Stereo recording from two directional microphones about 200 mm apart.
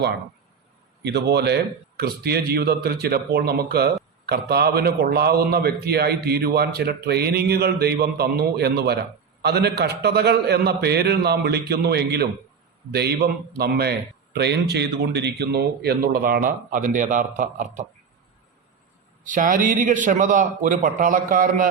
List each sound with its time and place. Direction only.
1.0 s a man's voice: 55° right (ahead or behind); by 17.8 s 40° right (ahead or behind)
19.2 s a man's voice: 40° right (ahead or behind)